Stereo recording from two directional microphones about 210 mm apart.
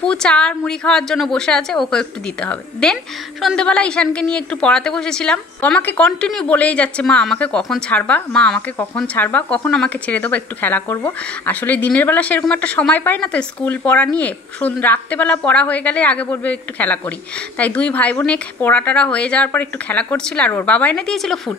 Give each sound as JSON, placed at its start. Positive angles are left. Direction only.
{"t": 0.0, "sound": "a woman's voice", "side_deg": 5}